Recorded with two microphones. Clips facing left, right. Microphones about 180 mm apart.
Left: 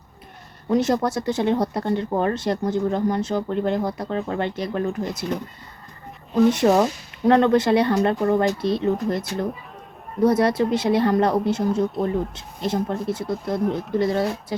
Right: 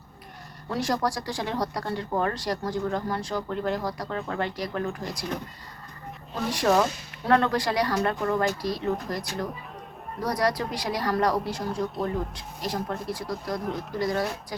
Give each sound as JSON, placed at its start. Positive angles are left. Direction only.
{"t": 0.7, "sound": "speech", "side_deg": 20}
{"t": 6.5, "sound": "speech", "side_deg": 25}